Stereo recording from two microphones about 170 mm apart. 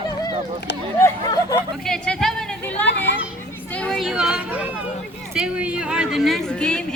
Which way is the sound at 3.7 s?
5° left (ahead or behind).